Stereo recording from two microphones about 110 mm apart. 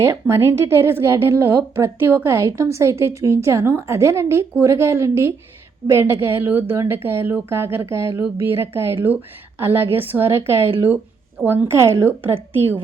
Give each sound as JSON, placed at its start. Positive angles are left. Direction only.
{"t": 0.0, "sound": "a woman's voice", "side_deg": -25}